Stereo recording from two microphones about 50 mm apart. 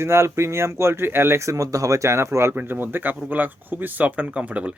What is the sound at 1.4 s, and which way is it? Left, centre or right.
Speech, right.